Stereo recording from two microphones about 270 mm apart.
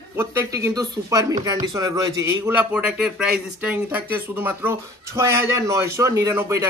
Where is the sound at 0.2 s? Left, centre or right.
Centre.